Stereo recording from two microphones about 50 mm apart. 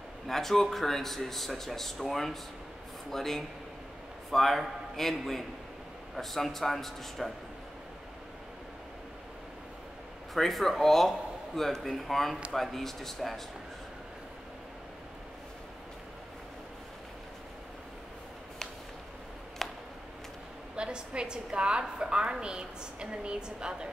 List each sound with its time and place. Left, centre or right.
0.3 s speech: centre
10.3 s a man's voice: centre
19.6 s a sound: centre
20.7 s a woman's voice: centre